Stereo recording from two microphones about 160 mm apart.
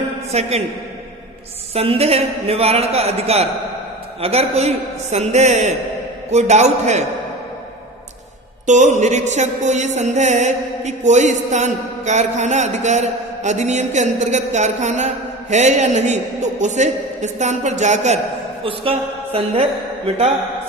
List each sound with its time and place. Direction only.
0.3 s a man's voice: 40° right (ahead or behind)
1.7 s a man's voice: 40° right (ahead or behind)
5.1 s music: 45° right (ahead or behind)
8.6 s music: 50° right (ahead or behind)
18.6 s a man's voice: 35° right (ahead or behind)